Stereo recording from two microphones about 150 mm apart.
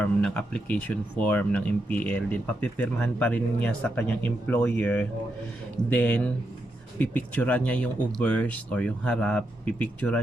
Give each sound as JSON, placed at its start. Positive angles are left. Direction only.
{"t": 0.0, "sound": "speech", "side_deg": 5}